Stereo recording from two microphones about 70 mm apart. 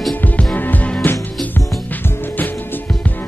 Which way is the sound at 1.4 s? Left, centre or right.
Centre.